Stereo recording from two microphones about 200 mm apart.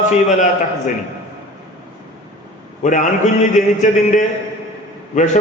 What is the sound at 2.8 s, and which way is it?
Speech, 40° left (ahead or behind).